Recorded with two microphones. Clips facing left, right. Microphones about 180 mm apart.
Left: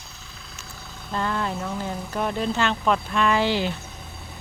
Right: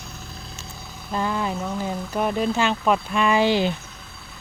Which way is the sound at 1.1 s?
10° right (ahead or behind).